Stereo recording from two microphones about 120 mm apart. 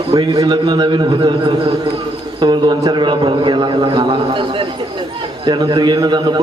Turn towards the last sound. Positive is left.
turn(degrees=-35)  # may be behind; listen again after turning